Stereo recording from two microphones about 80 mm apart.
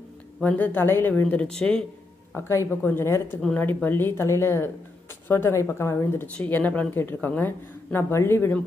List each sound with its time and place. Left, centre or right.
0.4 s speech: left
1.4 s speech: centre
2.3 s speech: left
6.2 s speech: centre